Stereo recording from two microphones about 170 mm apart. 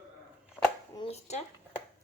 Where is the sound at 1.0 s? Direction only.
40° left (ahead or behind).